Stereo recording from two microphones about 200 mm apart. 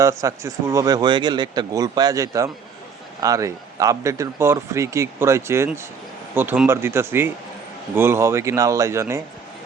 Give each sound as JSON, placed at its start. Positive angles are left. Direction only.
{"t": 0.0, "sound": "speech", "side_deg": -15}